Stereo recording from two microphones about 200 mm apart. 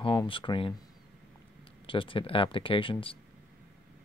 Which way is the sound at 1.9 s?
25° left (ahead or behind).